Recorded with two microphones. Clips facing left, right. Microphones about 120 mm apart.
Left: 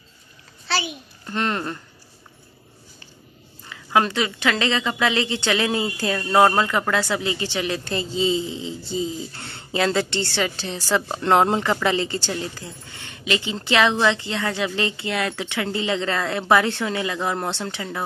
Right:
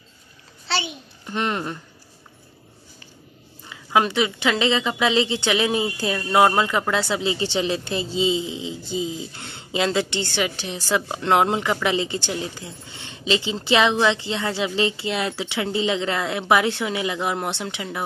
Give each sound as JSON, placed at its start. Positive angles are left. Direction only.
{"t": 0.7, "sound": "a child's voice", "side_deg": -25}
{"t": 1.2, "sound": "speech", "side_deg": -15}
{"t": 3.6, "sound": "a woman's voice", "side_deg": -15}